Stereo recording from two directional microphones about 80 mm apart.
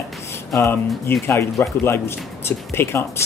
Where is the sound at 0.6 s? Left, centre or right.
Left.